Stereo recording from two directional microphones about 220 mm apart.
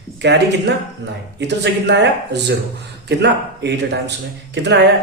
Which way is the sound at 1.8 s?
50° right (ahead or behind).